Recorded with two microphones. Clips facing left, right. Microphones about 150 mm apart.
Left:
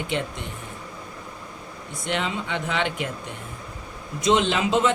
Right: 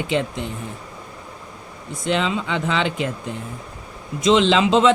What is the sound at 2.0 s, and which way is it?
Speech, 90° right.